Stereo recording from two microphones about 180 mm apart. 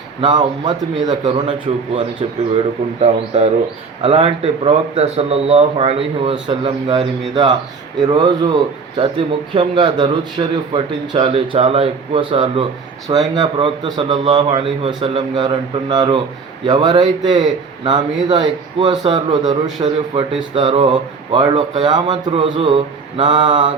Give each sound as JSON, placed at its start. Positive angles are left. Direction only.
{"t": 0.2, "sound": "a man's voice", "side_deg": -25}